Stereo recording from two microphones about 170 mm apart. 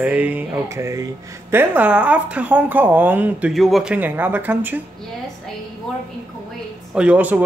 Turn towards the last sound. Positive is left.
turn(degrees=-10)  # may be behind; listen again after turning